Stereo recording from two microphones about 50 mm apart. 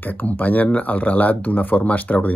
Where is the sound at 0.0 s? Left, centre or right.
Left.